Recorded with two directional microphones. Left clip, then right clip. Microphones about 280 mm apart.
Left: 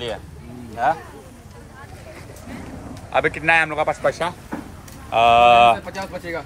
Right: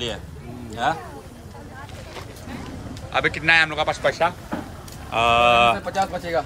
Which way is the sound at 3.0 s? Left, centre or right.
Centre.